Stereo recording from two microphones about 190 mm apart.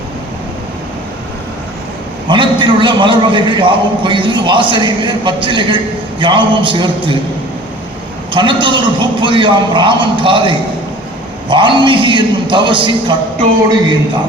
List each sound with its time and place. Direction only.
2.3 s a man's voice: 25° right (ahead or behind)
8.3 s a man's voice: 25° right (ahead or behind)